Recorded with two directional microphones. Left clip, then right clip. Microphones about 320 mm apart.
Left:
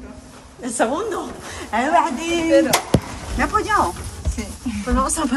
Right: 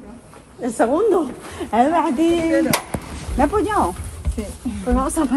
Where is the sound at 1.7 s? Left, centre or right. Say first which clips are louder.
Even; centre.